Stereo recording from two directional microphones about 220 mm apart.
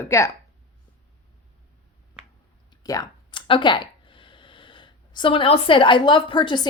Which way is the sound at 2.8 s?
15° left (ahead or behind).